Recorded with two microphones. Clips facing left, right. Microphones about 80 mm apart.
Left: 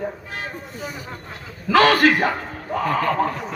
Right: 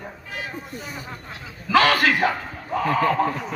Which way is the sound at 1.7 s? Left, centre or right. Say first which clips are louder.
Left 3 dB; left.